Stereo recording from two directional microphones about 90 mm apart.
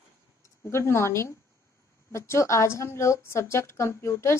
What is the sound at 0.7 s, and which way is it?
A woman's voice, 30° left (ahead or behind).